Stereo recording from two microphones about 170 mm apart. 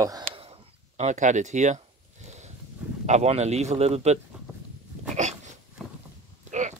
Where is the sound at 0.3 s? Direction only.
35° right (ahead or behind).